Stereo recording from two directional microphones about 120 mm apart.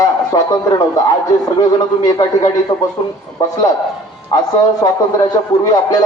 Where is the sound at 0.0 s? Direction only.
30° left (ahead or behind).